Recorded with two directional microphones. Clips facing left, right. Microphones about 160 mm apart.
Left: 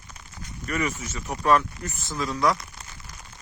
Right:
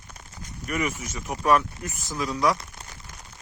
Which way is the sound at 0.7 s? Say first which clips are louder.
Even; 10° right (ahead or behind).